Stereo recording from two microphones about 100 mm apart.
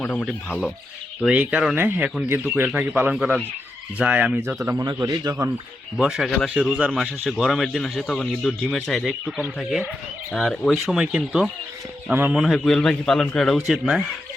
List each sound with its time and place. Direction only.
0.0 s speech: 15° left (ahead or behind)
0.3 s speech: centre (ahead or behind)
1.3 s speech: 10° right (ahead or behind)
4.4 s speech: 25° right (ahead or behind)
4.8 s a man's voice: 35° right (ahead or behind)
6.0 s speech: 5° right (ahead or behind)
11.0 s speech: 10° right (ahead or behind)
12.0 s speech: 20° right (ahead or behind)
12.3 s speech: centre (ahead or behind)